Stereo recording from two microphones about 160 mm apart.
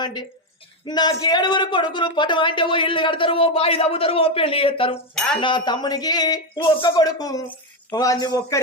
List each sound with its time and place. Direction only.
0.0 s speech: 25° left (ahead or behind)
5.1 s speech: 5° left (ahead or behind)
5.4 s speech: 30° left (ahead or behind)